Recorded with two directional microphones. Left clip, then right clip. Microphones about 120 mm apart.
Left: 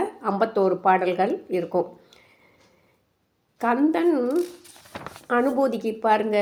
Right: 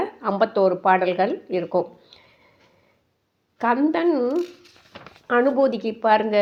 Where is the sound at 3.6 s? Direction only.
20° right (ahead or behind).